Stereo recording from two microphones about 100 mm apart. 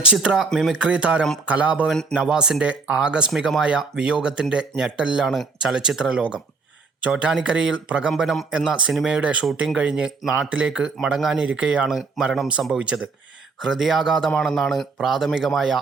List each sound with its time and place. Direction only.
0.1 s speech: 10° right (ahead or behind)
0.8 s speech: 10° right (ahead or behind)
1.9 s a man's voice: 5° left (ahead or behind)
2.1 s speech: 10° right (ahead or behind)
8.1 s a man's voice: centre (ahead or behind)